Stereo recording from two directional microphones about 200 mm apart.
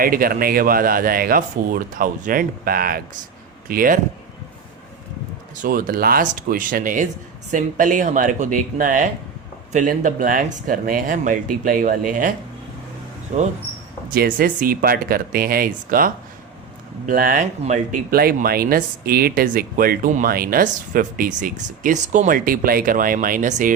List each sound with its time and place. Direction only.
0.0 s speech: 45° right (ahead or behind)
5.6 s speech: 45° right (ahead or behind)
13.3 s speech: 40° right (ahead or behind)